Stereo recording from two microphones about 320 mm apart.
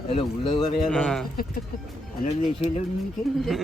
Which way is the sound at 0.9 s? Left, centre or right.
Centre.